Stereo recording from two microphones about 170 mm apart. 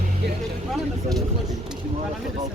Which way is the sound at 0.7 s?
Centre (ahead or behind).